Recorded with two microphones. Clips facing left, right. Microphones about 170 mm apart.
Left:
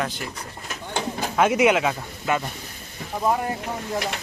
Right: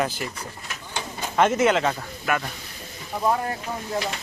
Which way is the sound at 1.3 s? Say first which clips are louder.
Left 1 dB; 10° left (ahead or behind).